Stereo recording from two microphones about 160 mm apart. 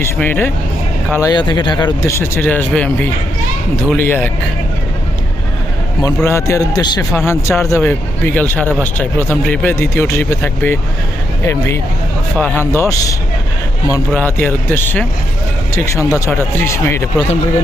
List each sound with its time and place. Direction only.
0.0 s speech: 15° left (ahead or behind)
1.1 s speech: 25° left (ahead or behind)
6.2 s speech: 20° left (ahead or behind)